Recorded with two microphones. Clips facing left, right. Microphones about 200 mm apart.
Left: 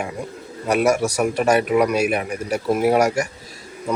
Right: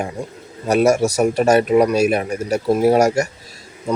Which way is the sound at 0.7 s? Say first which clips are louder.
Right 3 dB; 40° right (ahead or behind).